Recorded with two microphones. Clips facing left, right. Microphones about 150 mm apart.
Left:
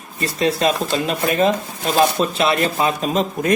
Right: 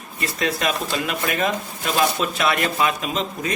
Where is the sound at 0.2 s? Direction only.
30° left (ahead or behind).